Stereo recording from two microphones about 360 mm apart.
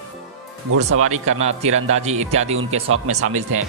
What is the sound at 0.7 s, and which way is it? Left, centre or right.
Speech, right.